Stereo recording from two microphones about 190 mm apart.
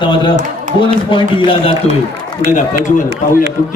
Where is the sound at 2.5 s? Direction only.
40° left (ahead or behind).